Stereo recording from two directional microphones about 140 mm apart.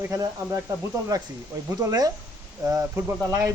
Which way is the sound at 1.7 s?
25° right (ahead or behind).